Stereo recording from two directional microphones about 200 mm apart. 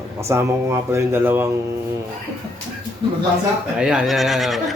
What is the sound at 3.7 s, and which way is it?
Speech, 5° right (ahead or behind).